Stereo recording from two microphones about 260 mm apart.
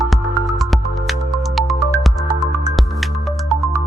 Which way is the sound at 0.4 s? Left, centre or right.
Centre.